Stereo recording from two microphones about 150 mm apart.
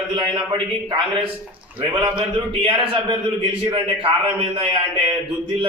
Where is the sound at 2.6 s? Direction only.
35° right (ahead or behind).